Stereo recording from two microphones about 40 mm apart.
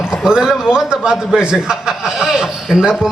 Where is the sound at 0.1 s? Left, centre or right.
Centre.